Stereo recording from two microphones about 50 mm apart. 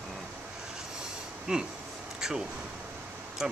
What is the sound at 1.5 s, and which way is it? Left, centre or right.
Speech, centre.